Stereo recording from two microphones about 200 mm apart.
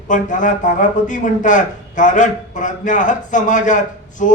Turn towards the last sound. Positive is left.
turn(degrees=40)  # may be behind; listen again after turning